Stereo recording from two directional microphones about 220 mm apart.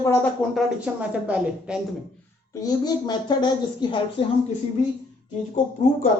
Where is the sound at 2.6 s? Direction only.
20° left (ahead or behind).